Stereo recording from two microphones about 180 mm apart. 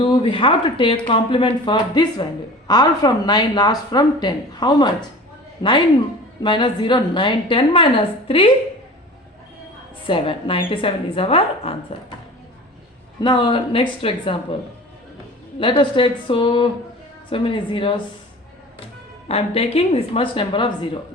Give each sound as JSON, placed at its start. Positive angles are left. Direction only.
{"t": 0.0, "sound": "speech", "side_deg": 30}
{"t": 10.1, "sound": "speech", "side_deg": 30}
{"t": 13.2, "sound": "speech", "side_deg": 25}
{"t": 15.5, "sound": "speech", "side_deg": 30}
{"t": 19.3, "sound": "speech", "side_deg": 35}